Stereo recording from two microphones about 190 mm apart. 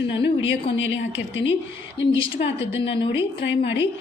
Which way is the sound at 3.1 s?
70° left (ahead or behind).